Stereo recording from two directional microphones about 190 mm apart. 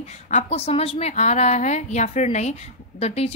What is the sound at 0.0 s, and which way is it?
A woman's voice, 35° left (ahead or behind).